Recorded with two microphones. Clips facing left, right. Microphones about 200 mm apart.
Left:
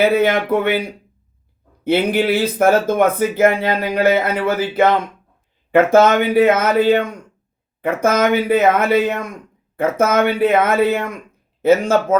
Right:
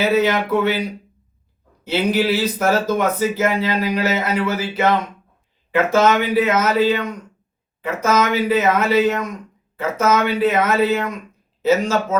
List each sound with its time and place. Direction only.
0.0 s speech: 55° left (ahead or behind)
1.8 s speech: 55° left (ahead or behind)